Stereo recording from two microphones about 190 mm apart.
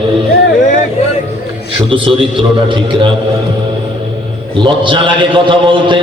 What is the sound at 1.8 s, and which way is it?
Speech, 30° right (ahead or behind).